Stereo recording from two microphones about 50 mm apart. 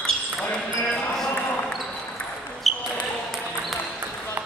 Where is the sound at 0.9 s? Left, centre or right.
Centre.